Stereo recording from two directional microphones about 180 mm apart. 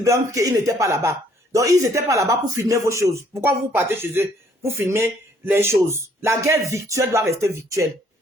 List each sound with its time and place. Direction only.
0.0 s speech: 15° right (ahead or behind)